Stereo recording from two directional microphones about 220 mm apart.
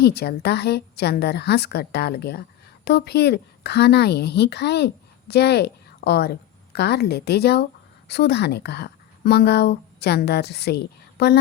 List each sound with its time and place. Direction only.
0.0 s a woman's voice: 45° left (ahead or behind)